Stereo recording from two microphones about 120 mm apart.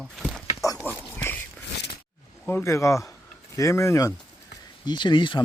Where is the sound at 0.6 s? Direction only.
25° left (ahead or behind).